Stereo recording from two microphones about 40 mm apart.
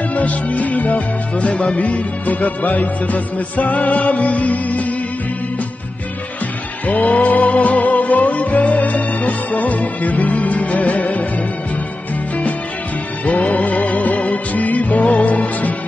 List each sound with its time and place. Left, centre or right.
0.1 s music: left
7.1 s music: left
13.2 s music: left